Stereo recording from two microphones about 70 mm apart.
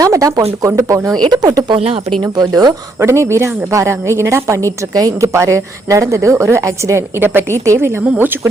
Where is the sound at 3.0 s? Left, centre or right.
Right.